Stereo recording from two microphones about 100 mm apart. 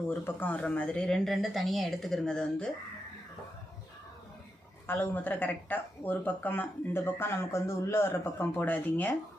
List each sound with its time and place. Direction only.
0.1 s speech: 20° left (ahead or behind)
4.9 s speech: 20° left (ahead or behind)